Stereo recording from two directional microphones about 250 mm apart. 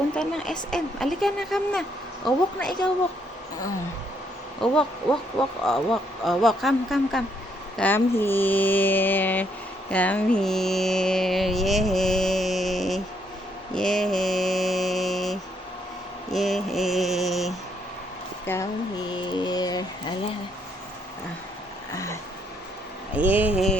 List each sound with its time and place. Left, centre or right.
0.2 s music: centre
4.6 s music: centre
7.8 s mantra: centre
9.9 s music: centre
13.7 s mantra: centre
18.4 s mantra: centre
21.9 s a sound: centre
23.1 s mantra: centre